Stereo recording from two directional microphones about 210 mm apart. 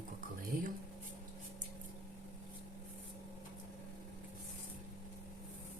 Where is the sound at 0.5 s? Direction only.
40° right (ahead or behind).